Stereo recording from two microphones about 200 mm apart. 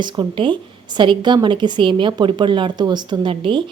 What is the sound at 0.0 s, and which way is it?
A woman's voice, 25° right (ahead or behind).